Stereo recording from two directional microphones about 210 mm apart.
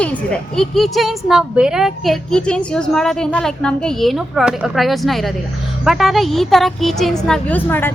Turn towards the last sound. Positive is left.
turn(degrees=10)  # may be behind; listen again after turning